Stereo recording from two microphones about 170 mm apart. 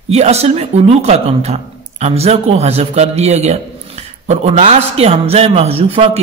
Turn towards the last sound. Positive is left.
turn(degrees=-35)  # may be behind; listen again after turning